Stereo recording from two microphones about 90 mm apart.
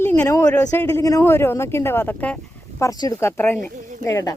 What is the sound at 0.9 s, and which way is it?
Speech, 40° left (ahead or behind).